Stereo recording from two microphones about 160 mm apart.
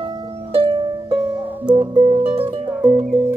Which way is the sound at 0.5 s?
30° right (ahead or behind).